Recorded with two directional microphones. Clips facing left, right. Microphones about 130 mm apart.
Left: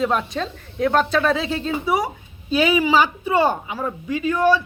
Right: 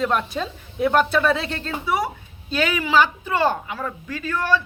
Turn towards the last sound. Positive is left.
turn(degrees=15)  # may be behind; listen again after turning